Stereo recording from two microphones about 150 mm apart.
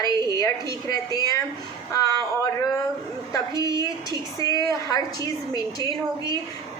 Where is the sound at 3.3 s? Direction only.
25° left (ahead or behind).